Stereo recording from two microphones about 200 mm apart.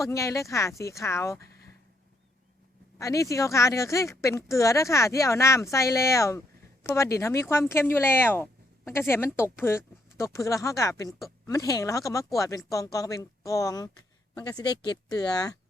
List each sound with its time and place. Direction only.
0.0 s speech: 15° left (ahead or behind)
3.0 s speech: 15° left (ahead or behind)